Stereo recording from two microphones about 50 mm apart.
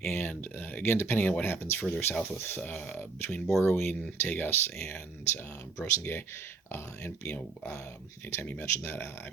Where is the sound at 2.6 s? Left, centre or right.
Left.